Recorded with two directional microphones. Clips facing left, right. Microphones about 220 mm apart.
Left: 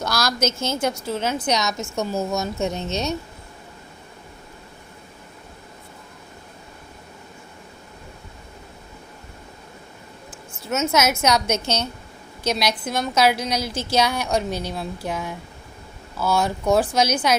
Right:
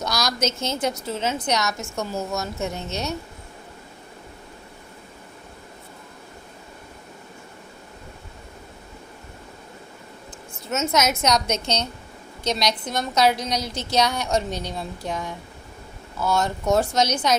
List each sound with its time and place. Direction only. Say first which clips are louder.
0.0 s a woman's voice: left 2 dB; centre (ahead or behind)
1.5 s a woman's voice: left 2 dB; 15° left (ahead or behind)
10.7 s a woman's voice: left 2 dB; centre (ahead or behind)